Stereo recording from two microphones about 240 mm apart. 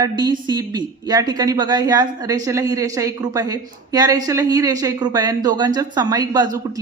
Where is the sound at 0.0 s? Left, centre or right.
Centre.